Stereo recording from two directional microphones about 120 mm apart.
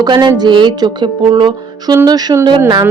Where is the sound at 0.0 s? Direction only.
35° right (ahead or behind).